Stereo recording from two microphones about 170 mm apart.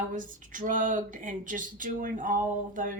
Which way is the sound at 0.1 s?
50° right (ahead or behind).